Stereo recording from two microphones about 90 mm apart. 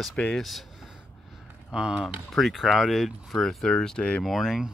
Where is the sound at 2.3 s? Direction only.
Centre (ahead or behind).